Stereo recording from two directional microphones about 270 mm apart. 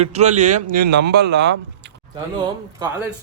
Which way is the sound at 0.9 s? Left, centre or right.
Right.